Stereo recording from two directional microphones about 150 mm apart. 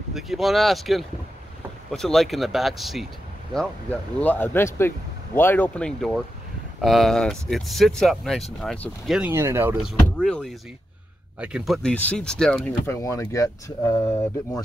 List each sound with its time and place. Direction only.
0.1 s speech: centre (ahead or behind)
3.5 s speech: 10° left (ahead or behind)
9.3 s speech: 15° right (ahead or behind)
9.8 s speech: centre (ahead or behind)
12.8 s speech: 20° left (ahead or behind)